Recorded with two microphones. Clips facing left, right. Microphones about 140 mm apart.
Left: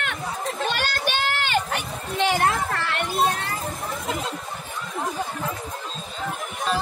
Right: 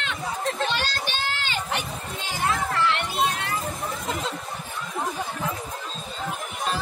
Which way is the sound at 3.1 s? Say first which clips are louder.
Left 2 dB; 35° left (ahead or behind).